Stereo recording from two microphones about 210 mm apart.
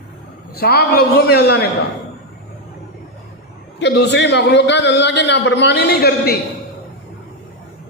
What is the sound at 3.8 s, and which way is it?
A man's voice, 55° left (ahead or behind).